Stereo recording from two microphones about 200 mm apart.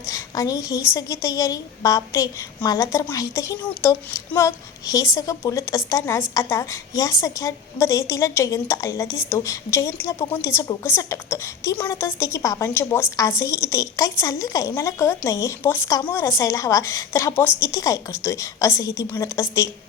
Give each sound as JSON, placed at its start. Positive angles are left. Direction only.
{"t": 0.1, "sound": "a woman's voice", "side_deg": 15}